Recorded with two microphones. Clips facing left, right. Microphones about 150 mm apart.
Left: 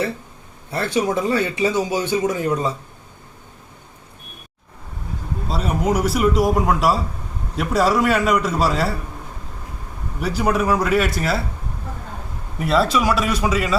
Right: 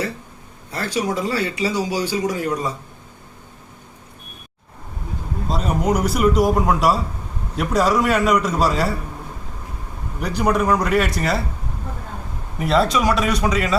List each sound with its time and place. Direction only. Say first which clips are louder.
0.7 s a man's voice: left 3 dB; 25° left (ahead or behind)
5.5 s speech: right 1 dB; 5° left (ahead or behind)
10.2 s speech: even; 5° left (ahead or behind)
12.5 s speech: even; centre (ahead or behind)